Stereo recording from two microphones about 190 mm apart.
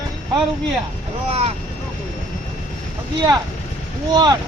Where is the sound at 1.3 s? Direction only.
30° right (ahead or behind).